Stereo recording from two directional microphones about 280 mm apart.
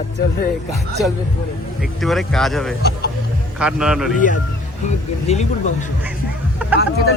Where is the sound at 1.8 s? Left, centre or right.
Centre.